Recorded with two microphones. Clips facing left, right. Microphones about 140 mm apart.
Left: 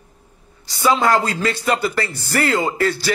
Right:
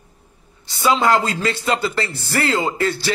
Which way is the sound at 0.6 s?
20° right (ahead or behind).